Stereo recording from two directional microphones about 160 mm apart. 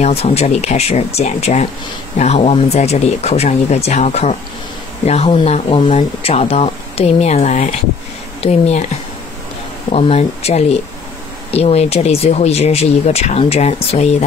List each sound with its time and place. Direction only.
0.0 s speech: 40° left (ahead or behind)
9.9 s speech: 40° left (ahead or behind)